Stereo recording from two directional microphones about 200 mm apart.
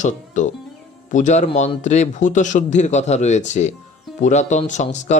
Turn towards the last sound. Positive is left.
turn(degrees=35)  # may be behind; listen again after turning